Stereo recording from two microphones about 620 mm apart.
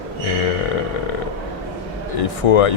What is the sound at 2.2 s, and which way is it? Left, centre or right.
Speech, left.